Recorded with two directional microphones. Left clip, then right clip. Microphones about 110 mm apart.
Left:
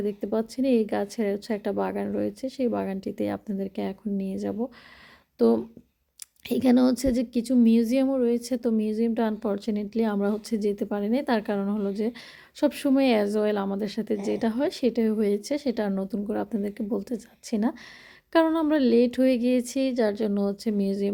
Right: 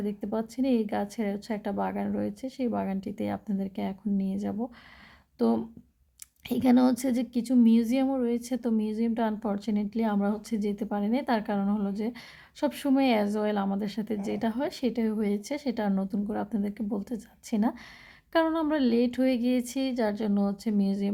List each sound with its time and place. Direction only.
0.0 s a woman's voice: 30° left (ahead or behind)